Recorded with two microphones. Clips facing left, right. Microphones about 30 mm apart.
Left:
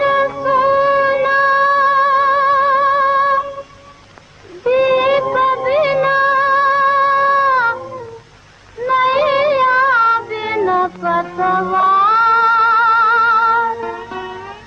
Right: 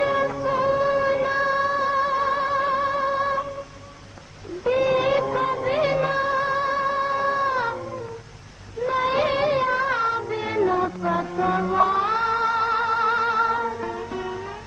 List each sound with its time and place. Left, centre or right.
0.0 s music: left
4.7 s a sound: left
5.1 s music: left
5.4 s music: left
8.8 s a sound: left
9.3 s music: left
10.2 s child singing: left
11.0 s mantra: left
12.1 s music: left
13.1 s music: left
13.7 s music: left
13.9 s music: left